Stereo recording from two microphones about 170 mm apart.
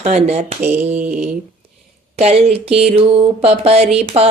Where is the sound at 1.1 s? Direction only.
45° right (ahead or behind).